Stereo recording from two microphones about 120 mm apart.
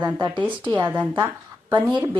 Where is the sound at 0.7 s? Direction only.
15° right (ahead or behind).